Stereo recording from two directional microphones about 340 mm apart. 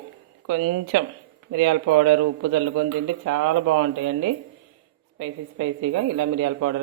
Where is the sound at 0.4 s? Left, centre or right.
Right.